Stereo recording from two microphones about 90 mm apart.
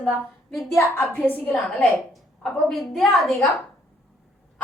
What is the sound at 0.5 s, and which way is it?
Speech, centre (ahead or behind).